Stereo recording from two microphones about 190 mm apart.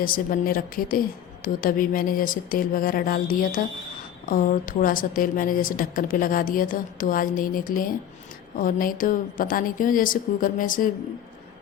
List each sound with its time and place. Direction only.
0.0 s a woman's voice: 50° left (ahead or behind)